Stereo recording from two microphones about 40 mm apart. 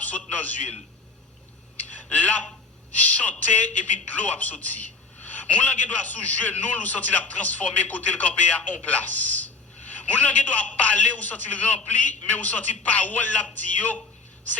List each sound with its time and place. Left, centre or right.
0.0 s a man's voice: left
1.7 s a sound: left
2.9 s a man's voice: left